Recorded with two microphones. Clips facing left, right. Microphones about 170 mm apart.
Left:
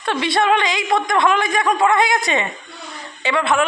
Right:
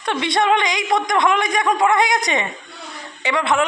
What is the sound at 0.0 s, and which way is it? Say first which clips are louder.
A woman's voice: left 1 dB; 20° right (ahead or behind).